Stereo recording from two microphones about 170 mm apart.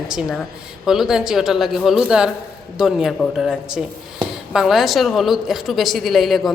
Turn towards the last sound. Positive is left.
turn(degrees=0)  # may be behind; listen again after turning